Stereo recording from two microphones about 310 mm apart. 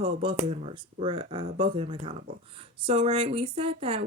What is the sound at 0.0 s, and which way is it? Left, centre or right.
Speech, centre.